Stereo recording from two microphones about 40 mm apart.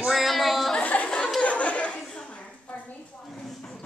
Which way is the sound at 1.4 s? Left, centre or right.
Left.